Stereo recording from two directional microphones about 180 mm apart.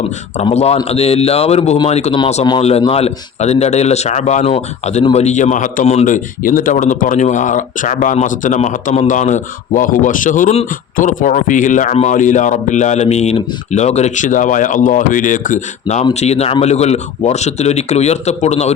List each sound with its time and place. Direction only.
0.4 s speech: 35° left (ahead or behind)
5.8 s a man's voice: 35° left (ahead or behind)